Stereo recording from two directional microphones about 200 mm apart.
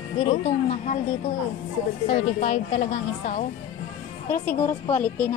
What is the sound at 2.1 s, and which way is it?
Speech, 35° left (ahead or behind).